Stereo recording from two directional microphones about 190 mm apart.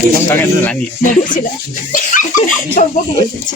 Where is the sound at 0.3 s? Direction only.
10° left (ahead or behind).